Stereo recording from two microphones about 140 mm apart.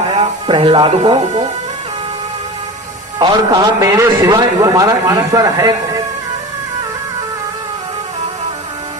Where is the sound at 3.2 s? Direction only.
30° right (ahead or behind).